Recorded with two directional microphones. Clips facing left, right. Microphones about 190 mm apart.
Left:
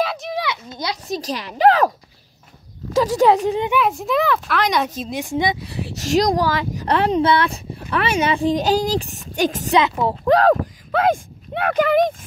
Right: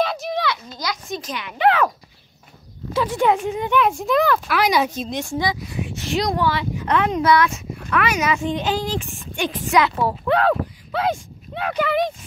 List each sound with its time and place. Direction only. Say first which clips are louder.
0.0 s a sound: right 1 dB; 5° left (ahead or behind)
0.4 s a child's voice: even; 20° left (ahead or behind); by 1.9 s 40° left (ahead or behind)
2.9 s speech: left 4 dB; 40° left (ahead or behind)
3.7 s speech: right 1 dB; centre (ahead or behind)
5.2 s speech: left 4 dB; 20° left (ahead or behind)
5.7 s speech: left 4 dB; 35° left (ahead or behind)
9.8 s speech: left 1 dB; 20° left (ahead or behind)
10.2 s speech: left 5 dB; 40° left (ahead or behind)